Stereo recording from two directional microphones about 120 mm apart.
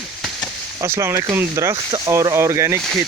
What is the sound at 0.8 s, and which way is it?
Speech, 25° right (ahead or behind).